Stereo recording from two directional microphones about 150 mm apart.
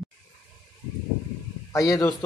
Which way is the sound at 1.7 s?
20° left (ahead or behind).